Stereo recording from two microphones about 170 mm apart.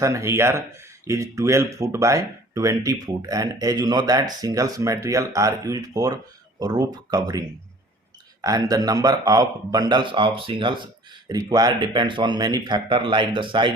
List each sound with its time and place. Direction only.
0.0 s speech: 15° right (ahead or behind)